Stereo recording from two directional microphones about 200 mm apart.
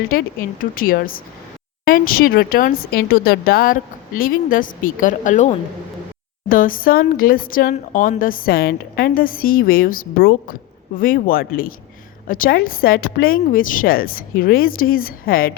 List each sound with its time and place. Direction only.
0.6 s speech: 45° left (ahead or behind)